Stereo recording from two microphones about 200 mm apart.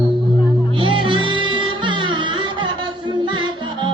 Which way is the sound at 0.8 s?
25° right (ahead or behind).